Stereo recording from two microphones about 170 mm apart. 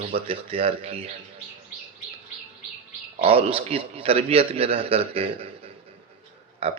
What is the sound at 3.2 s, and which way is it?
Speech, 35° right (ahead or behind).